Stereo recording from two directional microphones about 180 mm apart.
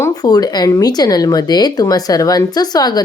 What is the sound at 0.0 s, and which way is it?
Speech, 20° left (ahead or behind).